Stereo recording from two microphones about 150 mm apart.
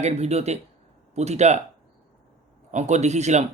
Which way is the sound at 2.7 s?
50° right (ahead or behind).